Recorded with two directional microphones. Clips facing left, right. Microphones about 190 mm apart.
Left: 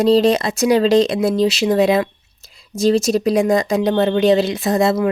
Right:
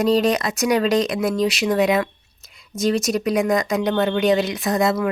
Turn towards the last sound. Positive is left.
turn(degrees=25)  # may be behind; listen again after turning